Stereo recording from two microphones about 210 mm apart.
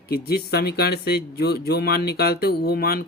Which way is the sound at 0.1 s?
50° left (ahead or behind).